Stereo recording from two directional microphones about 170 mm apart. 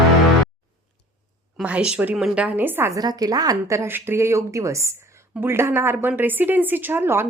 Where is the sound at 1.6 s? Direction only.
5° right (ahead or behind).